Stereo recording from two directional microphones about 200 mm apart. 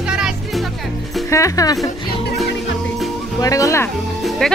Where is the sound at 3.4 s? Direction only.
15° left (ahead or behind).